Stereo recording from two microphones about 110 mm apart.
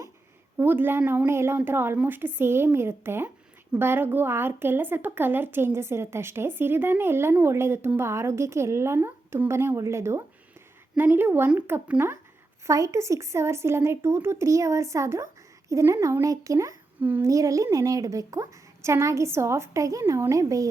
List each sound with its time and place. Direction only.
0.5 s a woman's voice: 20° right (ahead or behind)
17.0 s speech: 15° right (ahead or behind)
17.2 s a woman's voice: 30° right (ahead or behind)